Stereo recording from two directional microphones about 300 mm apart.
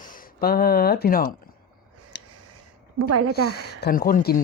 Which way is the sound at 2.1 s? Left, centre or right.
Left.